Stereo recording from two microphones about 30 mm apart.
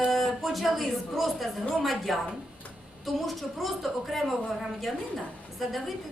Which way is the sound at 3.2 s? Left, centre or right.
Centre.